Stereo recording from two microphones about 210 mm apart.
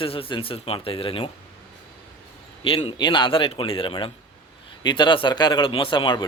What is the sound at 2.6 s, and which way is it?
A man's voice, 25° left (ahead or behind).